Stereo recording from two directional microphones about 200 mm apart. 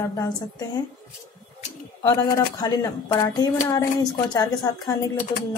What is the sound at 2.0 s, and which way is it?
A woman's voice, 15° left (ahead or behind).